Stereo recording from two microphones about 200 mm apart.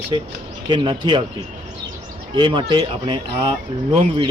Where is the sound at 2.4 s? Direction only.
25° right (ahead or behind).